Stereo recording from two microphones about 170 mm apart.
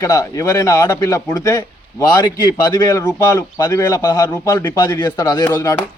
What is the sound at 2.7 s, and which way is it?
A man's voice, 20° left (ahead or behind).